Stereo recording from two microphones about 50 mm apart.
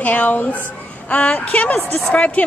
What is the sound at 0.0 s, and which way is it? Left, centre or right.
A woman's voice, left.